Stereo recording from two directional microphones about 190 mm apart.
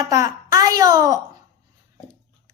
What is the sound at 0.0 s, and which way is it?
A child's voice, 15° right (ahead or behind).